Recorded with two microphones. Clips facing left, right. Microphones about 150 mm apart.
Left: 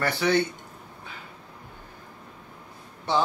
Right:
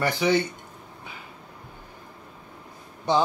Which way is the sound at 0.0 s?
10° right (ahead or behind).